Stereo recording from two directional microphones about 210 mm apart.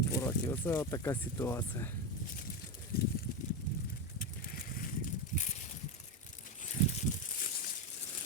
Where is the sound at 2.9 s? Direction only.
45° left (ahead or behind).